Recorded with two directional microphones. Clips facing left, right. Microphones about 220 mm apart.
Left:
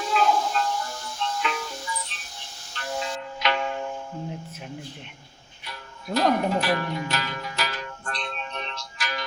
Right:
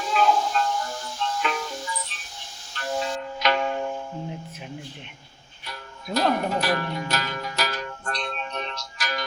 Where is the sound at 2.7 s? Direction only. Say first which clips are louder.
Right 3 dB; 40° right (ahead or behind).